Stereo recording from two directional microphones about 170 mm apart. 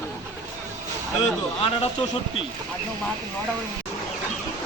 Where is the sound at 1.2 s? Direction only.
35° left (ahead or behind).